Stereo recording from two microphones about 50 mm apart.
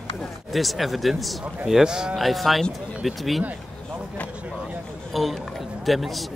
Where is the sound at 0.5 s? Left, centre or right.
Centre.